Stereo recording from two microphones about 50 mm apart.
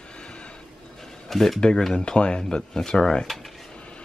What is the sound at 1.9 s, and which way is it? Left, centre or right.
Speech, centre.